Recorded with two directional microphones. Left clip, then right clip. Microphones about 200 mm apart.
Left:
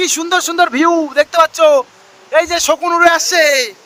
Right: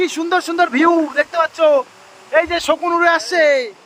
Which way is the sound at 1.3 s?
40° left (ahead or behind).